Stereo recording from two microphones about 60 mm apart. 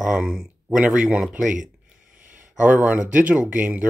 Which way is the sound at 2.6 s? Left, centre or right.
Right.